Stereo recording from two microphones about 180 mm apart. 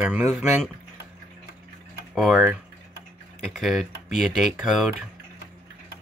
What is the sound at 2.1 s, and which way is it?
Speech, centre (ahead or behind).